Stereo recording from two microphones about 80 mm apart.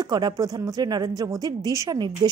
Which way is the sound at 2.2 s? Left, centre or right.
Right.